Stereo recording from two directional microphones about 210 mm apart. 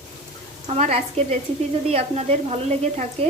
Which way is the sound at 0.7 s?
30° right (ahead or behind).